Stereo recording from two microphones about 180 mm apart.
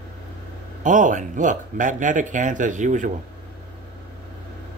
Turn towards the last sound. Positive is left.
turn(degrees=-45)  # may be behind; listen again after turning